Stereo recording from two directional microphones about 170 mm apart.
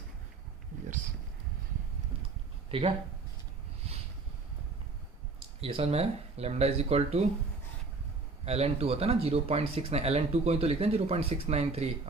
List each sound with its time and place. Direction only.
2.6 s speech: 35° right (ahead or behind)
3.9 s a sound: 35° right (ahead or behind)
5.5 s speech: 35° right (ahead or behind)
8.4 s speech: 35° right (ahead or behind)